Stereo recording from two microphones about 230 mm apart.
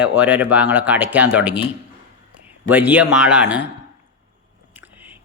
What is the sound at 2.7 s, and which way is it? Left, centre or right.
Speech, centre.